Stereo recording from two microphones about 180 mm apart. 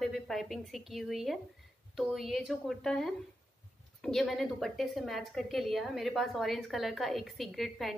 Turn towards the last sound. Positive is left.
turn(degrees=0)  # may be behind; listen again after turning